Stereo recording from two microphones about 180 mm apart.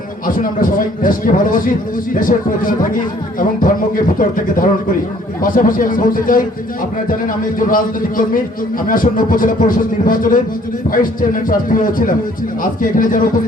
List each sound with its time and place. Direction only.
0.3 s a man's voice: 50° left (ahead or behind)
7.6 s a man's voice: 50° left (ahead or behind)